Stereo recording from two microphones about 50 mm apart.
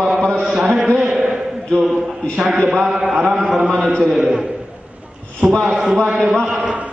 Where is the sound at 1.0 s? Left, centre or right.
Centre.